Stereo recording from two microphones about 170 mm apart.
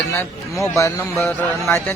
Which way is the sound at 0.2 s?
20° left (ahead or behind).